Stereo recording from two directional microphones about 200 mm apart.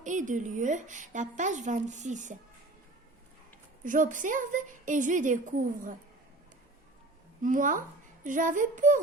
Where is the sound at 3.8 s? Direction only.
40° right (ahead or behind).